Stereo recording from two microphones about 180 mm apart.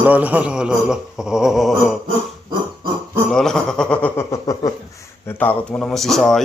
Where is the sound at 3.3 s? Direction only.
5° left (ahead or behind).